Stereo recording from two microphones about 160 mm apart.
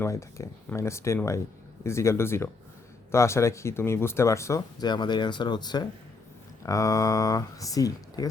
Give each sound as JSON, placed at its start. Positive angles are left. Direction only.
{"t": 0.0, "sound": "speech", "side_deg": 20}